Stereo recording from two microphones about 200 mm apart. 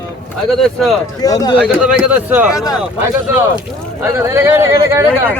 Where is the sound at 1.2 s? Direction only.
20° left (ahead or behind).